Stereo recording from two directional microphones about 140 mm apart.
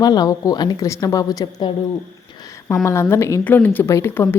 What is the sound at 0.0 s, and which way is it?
Speech, 30° left (ahead or behind).